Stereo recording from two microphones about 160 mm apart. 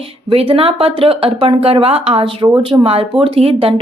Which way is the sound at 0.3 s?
35° right (ahead or behind).